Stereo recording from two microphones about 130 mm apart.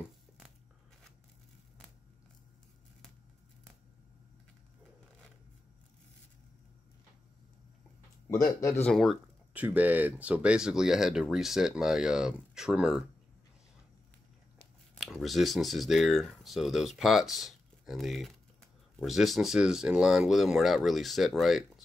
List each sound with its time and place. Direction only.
8.3 s speech: 20° left (ahead or behind)
8.8 s speech: centre (ahead or behind)
15.0 s speech: centre (ahead or behind)